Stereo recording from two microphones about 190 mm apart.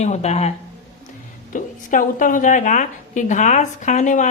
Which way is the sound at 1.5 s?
45° left (ahead or behind).